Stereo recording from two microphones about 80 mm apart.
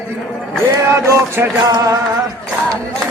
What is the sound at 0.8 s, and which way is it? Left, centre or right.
Speech, right.